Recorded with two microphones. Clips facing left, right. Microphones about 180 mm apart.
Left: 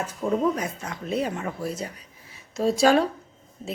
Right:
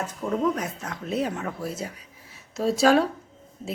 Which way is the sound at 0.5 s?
Centre (ahead or behind).